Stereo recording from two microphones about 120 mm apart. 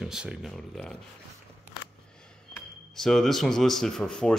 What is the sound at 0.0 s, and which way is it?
Speech, 5° right (ahead or behind).